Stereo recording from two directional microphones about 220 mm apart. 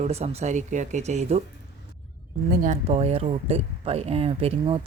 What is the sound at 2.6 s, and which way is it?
Speech, 30° right (ahead or behind).